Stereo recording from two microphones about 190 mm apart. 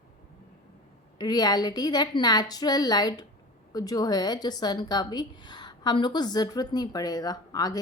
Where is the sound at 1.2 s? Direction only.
20° left (ahead or behind).